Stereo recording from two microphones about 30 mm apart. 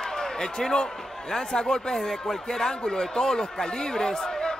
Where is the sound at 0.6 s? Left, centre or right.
Centre.